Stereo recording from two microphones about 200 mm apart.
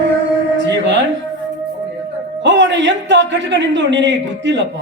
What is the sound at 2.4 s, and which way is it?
A man's voice, 65° right (ahead or behind).